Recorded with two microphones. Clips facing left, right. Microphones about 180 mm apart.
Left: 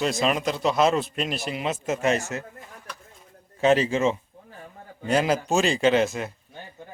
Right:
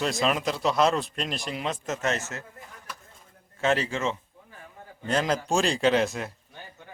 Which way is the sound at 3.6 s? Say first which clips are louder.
Left 6 dB; 20° left (ahead or behind).